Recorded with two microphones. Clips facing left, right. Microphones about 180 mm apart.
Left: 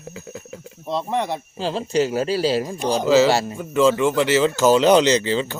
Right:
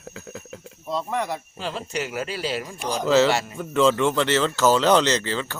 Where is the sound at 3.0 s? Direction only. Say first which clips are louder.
Left 2 dB; 5° left (ahead or behind).